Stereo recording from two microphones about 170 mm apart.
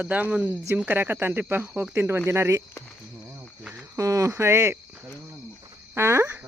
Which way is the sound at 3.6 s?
5° right (ahead or behind).